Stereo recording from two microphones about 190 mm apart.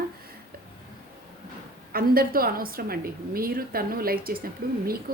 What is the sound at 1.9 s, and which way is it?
A woman's voice, 50° right (ahead or behind).